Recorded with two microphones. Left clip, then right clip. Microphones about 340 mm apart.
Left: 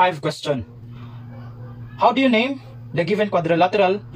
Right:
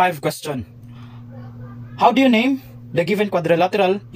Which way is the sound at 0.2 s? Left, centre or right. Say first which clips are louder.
Right 2 dB; right.